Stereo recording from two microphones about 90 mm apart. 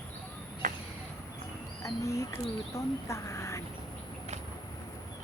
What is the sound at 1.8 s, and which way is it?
A child's voice, 35° left (ahead or behind).